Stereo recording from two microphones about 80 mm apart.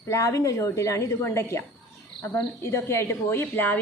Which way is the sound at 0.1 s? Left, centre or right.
Left.